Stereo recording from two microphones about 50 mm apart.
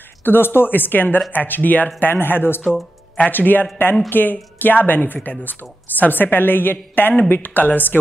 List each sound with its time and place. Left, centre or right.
0.2 s a woman's voice: left